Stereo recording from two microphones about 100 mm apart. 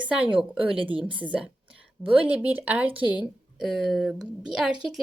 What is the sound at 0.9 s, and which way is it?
Speech, 60° right (ahead or behind).